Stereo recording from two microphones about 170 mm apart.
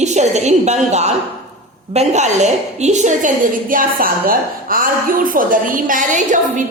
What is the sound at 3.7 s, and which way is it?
A woman's voice, 55° right (ahead or behind).